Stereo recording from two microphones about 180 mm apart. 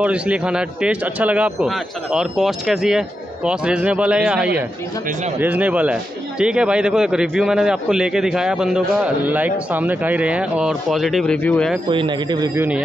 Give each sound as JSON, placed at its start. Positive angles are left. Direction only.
{"t": 0.0, "sound": "a man's voice", "side_deg": -5}
{"t": 11.9, "sound": "speech", "side_deg": -25}
{"t": 12.5, "sound": "speech", "side_deg": -10}